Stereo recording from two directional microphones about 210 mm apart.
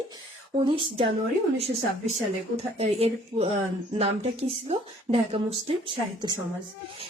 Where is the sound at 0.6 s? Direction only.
25° right (ahead or behind).